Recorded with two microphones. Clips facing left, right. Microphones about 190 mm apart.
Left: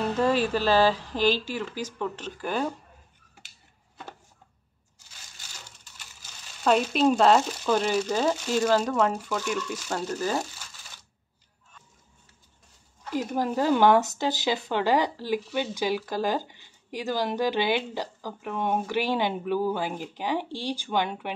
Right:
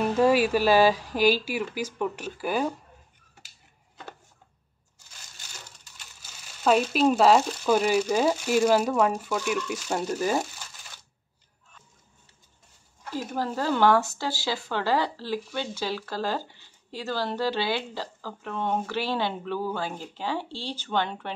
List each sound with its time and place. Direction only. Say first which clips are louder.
0.2 s speech: right 3 dB; 10° right (ahead or behind)
6.6 s speech: even; 5° right (ahead or behind)
13.1 s speech: left 3 dB; 15° left (ahead or behind)